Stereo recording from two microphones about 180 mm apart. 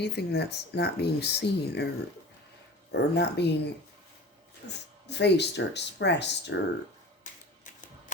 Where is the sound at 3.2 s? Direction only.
70° left (ahead or behind).